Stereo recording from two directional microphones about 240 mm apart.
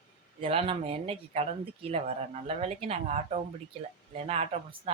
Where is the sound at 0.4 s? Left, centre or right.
Right.